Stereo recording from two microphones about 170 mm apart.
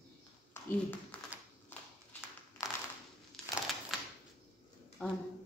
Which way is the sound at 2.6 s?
15° left (ahead or behind).